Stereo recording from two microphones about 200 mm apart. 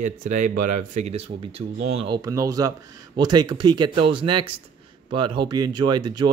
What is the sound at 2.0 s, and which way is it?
Speech, 20° right (ahead or behind).